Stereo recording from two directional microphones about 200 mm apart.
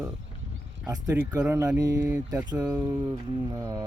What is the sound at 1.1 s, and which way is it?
Speech, 10° right (ahead or behind).